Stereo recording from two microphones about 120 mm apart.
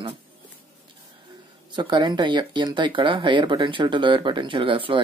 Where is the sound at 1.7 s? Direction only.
40° right (ahead or behind).